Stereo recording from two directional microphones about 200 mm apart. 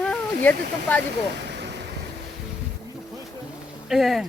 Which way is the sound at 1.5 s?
60° right (ahead or behind).